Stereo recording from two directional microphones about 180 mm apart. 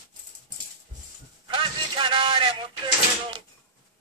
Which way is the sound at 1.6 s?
25° right (ahead or behind).